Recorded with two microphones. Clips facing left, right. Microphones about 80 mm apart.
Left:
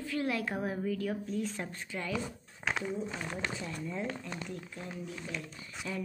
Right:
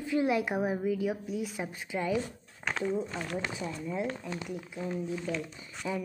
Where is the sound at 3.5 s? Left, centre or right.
Centre.